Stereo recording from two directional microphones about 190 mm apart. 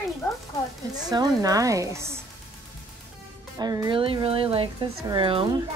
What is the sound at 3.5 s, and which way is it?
Speech, 20° right (ahead or behind).